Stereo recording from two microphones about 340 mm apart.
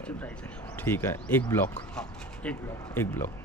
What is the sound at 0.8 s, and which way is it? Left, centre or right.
Speech, centre.